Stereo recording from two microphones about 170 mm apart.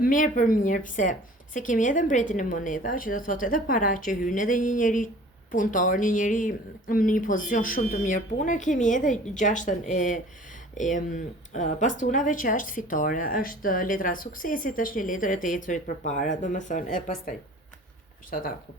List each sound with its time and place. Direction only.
0.0 s speech: 50° left (ahead or behind)